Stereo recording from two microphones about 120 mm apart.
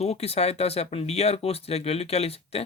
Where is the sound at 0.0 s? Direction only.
60° left (ahead or behind).